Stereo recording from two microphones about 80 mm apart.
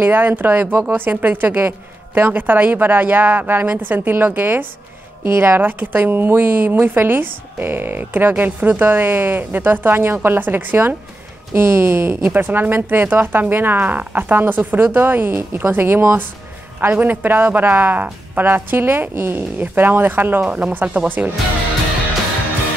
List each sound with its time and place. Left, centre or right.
0.0 s a woman's voice: right